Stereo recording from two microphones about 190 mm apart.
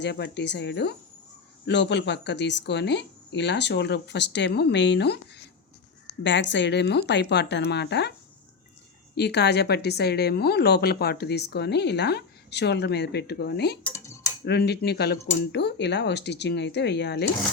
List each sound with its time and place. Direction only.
0.0 s speech: 65° left (ahead or behind)
9.1 s speech: 60° left (ahead or behind)
13.8 s a sound: 15° left (ahead or behind)
14.4 s speech: 60° left (ahead or behind)